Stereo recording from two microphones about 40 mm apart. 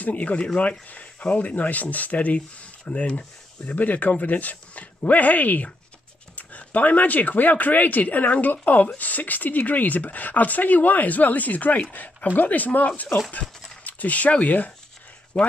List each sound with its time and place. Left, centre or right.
0.0 s speech: left
3.7 s speech: left
15.3 s speech: left